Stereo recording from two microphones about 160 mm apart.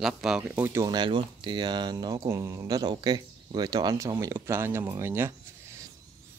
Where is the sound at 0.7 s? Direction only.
25° right (ahead or behind).